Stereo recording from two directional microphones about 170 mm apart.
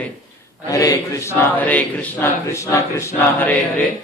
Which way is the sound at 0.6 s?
20° left (ahead or behind).